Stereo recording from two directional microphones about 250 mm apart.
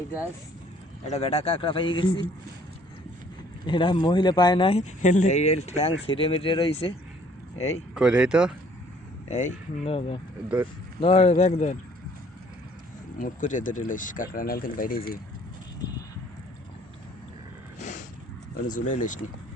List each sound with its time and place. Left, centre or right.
1.0 s speech: left
3.7 s speech: centre
7.9 s speech: centre
9.3 s speech: left
13.1 s speech: left
17.7 s a sound: left
18.7 s speech: left